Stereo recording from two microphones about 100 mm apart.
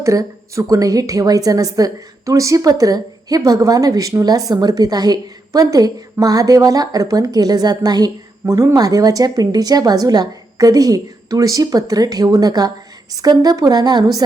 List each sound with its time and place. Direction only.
0.0 s a woman's voice: 30° right (ahead or behind)